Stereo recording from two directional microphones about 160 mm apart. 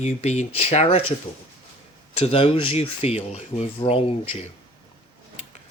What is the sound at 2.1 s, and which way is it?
Speech, 35° left (ahead or behind).